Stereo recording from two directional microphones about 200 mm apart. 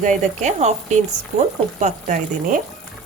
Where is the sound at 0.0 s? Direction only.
35° right (ahead or behind).